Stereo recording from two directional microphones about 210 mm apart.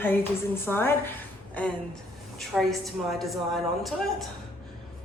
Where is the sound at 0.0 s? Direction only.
10° left (ahead or behind).